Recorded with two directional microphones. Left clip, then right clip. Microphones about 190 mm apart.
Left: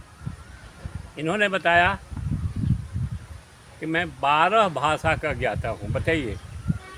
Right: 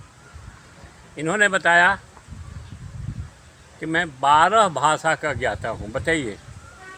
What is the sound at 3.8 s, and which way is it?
Speech, 10° right (ahead or behind).